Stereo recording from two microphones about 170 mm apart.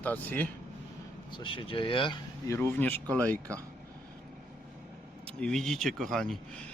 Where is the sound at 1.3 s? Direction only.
30° left (ahead or behind).